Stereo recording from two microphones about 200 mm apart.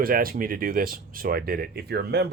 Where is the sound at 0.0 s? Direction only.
45° right (ahead or behind).